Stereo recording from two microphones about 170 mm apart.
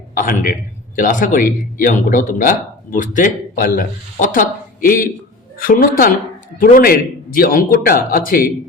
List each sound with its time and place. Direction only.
0.1 s a man's voice: 55° left (ahead or behind)